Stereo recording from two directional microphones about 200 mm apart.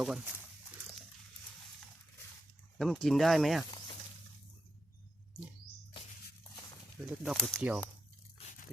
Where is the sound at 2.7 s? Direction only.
Centre (ahead or behind).